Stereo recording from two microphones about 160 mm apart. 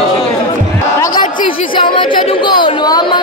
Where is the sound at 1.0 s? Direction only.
25° left (ahead or behind).